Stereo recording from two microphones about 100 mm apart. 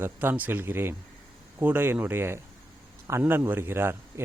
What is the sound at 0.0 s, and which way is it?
Speech, 20° right (ahead or behind).